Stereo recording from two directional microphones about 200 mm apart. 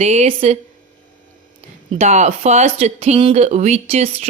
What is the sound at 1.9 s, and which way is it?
Speech, 35° right (ahead or behind).